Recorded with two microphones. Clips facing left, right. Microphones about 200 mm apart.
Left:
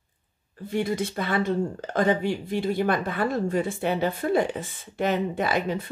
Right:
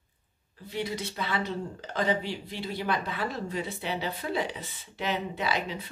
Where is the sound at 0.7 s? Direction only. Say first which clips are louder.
Left 7 dB; 50° left (ahead or behind).